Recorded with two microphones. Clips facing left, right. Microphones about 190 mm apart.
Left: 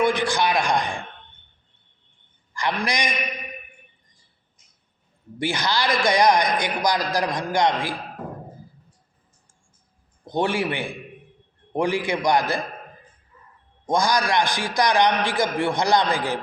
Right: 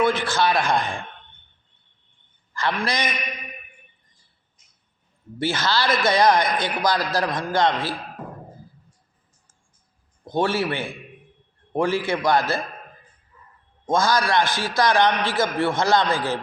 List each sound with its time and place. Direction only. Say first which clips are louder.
0.0 s a man's voice: even; 15° left (ahead or behind)
2.5 s a man's voice: even; 15° left (ahead or behind)
5.4 s a man's voice: right 1 dB; 15° left (ahead or behind)
10.2 s a man's voice: right 1 dB; 15° left (ahead or behind)
13.9 s a man's voice: right 1 dB; 15° left (ahead or behind)